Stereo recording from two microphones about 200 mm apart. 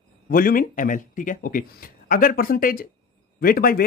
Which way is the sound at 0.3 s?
45° left (ahead or behind).